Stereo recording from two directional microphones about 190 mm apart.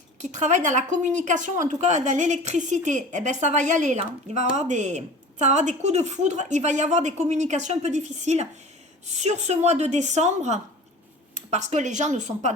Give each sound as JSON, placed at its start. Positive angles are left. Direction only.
{"t": 0.2, "sound": "speech", "side_deg": -40}